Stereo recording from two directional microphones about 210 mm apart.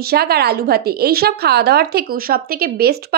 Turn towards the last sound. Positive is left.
turn(degrees=-45)  # may be behind; listen again after turning